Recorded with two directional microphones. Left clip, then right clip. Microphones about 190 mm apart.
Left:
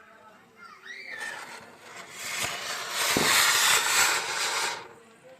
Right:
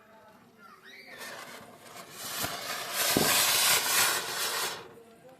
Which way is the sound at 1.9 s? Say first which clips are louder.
Left 4 dB; 35° right (ahead or behind).